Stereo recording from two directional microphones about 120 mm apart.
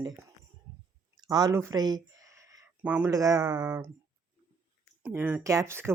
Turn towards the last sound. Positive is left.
turn(degrees=-20)  # may be behind; listen again after turning